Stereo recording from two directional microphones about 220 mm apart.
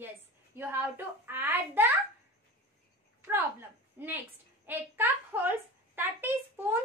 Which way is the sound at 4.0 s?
10° right (ahead or behind).